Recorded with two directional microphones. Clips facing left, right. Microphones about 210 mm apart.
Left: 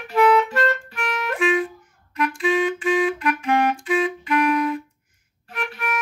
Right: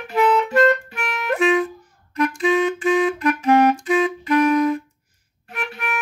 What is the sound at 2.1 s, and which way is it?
Clarinet, 40° right (ahead or behind).